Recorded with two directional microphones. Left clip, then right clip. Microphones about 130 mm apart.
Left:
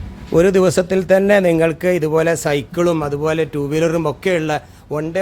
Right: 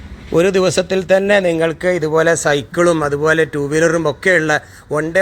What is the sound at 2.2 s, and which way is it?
Speech, 15° left (ahead or behind).